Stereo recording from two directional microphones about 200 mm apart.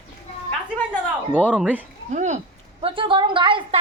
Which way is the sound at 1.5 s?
5° right (ahead or behind).